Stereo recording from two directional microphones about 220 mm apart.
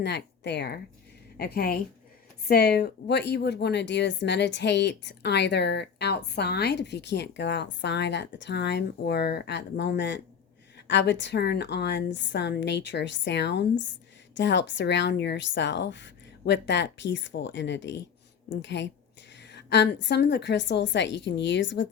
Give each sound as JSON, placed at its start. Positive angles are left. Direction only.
{"t": 0.0, "sound": "speech", "side_deg": 50}